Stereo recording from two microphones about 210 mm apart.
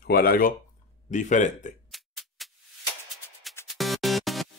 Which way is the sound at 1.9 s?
Centre (ahead or behind).